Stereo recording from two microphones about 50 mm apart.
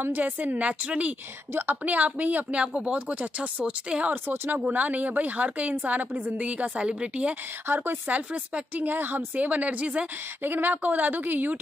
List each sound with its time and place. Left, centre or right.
0.2 s a woman's voice: right
4.1 s speech: right
4.6 s a woman's voice: right
7.6 s speech: right
8.1 s a woman's voice: right
8.7 s a woman's voice: right
10.4 s a woman's voice: right